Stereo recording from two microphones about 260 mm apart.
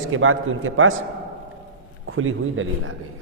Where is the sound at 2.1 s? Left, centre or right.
Right.